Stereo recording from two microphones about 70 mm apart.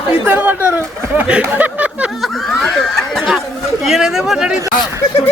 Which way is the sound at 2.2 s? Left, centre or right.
Centre.